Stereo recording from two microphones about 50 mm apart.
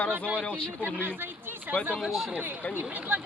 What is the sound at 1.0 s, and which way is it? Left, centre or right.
Speech, right.